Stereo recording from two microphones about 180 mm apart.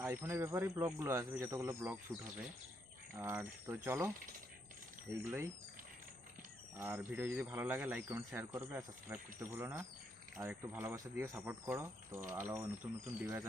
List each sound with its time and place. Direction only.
0.0 s speech: 15° right (ahead or behind)
3.2 s speech: 15° right (ahead or behind)
6.7 s speech: 10° right (ahead or behind)